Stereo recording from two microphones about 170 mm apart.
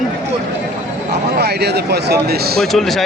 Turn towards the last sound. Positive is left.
turn(degrees=0)  # may be behind; listen again after turning